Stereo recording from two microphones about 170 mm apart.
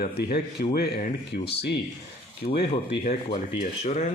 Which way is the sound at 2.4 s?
50° left (ahead or behind).